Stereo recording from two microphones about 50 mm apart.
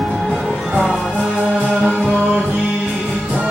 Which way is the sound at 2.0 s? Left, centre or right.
Centre.